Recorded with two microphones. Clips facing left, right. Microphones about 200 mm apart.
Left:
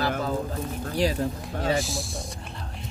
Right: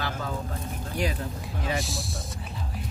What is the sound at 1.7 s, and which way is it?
Speech, centre (ahead or behind).